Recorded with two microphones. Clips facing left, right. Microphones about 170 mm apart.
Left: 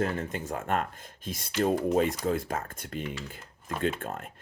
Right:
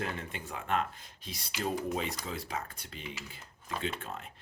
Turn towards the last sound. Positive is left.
turn(degrees=50)  # may be behind; listen again after turning